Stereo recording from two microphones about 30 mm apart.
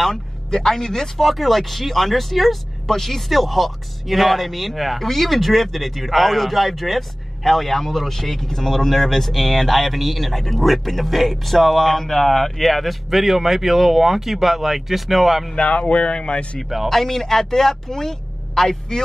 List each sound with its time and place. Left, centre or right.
0.1 s speech: centre
1.1 s speech: centre
15.5 s speech: left
16.6 s speech: centre
16.9 s a man's voice: centre